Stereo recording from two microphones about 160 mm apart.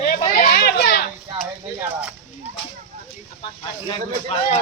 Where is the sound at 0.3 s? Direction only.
75° left (ahead or behind).